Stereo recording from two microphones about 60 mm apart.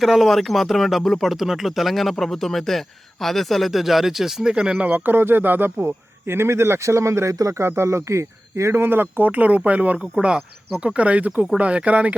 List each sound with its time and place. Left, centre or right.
0.0 s speech: centre
4.8 s speech: right
5.8 s speech: right